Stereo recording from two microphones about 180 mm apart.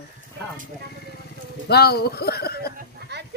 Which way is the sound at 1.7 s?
60° left (ahead or behind).